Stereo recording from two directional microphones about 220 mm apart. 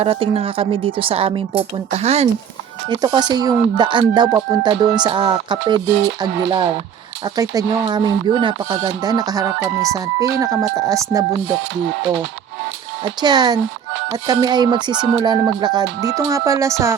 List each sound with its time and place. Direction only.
0.0 s speech: 25° right (ahead or behind)
13.2 s speech: 20° right (ahead or behind)